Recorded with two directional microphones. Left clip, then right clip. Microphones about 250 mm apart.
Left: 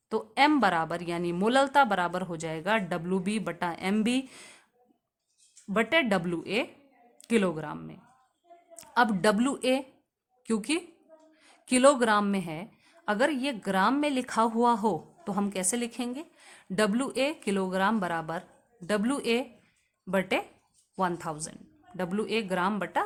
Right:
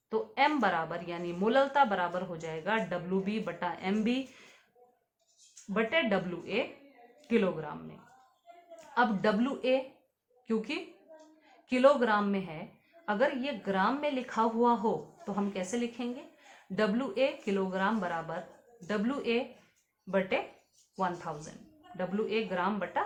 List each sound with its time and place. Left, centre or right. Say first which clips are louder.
0.1 s a woman's voice: left 4 dB; left
5.7 s a woman's voice: left 4 dB; left
8.8 s a woman's voice: left 4 dB; left